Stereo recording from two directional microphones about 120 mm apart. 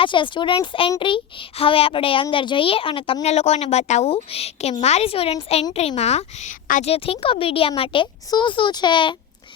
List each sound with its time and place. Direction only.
0.0 s a child's voice: 45° left (ahead or behind)
3.2 s speech: 65° left (ahead or behind)
4.1 s speech: 55° left (ahead or behind); by 6.9 s 80° left
6.9 s a child's voice: 50° left (ahead or behind)